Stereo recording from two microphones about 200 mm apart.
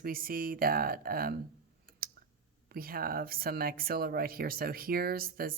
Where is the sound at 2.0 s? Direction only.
45° right (ahead or behind).